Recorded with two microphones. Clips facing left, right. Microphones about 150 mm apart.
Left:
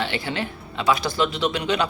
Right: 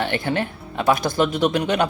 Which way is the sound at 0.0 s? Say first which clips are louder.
Right 4 dB; 50° right (ahead or behind).